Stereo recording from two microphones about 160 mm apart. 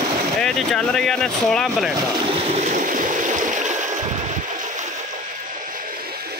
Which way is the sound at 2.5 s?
50° right (ahead or behind).